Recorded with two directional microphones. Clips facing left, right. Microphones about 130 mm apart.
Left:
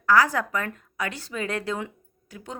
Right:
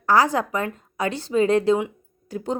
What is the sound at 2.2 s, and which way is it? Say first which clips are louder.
Speech: right 11 dB; 35° right (ahead or behind).